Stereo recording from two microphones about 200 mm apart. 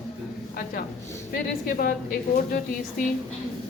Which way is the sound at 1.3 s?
45° left (ahead or behind).